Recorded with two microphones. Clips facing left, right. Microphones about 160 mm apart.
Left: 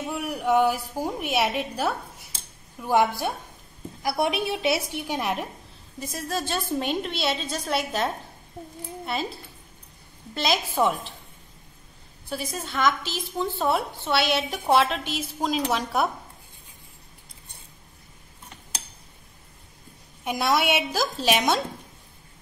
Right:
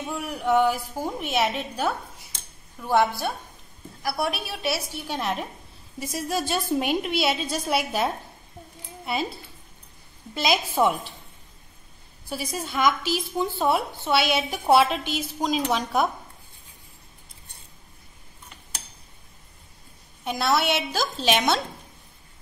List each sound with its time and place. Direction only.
0.1 s a woman's voice: 10° left (ahead or behind)
5.9 s a woman's voice: 10° right (ahead or behind)
10.3 s a woman's voice: 5° right (ahead or behind)
12.3 s a woman's voice: 5° right (ahead or behind)
20.2 s a woman's voice: 15° left (ahead or behind)